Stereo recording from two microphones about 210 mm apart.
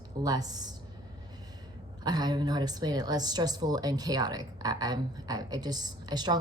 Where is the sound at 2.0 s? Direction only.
20° right (ahead or behind).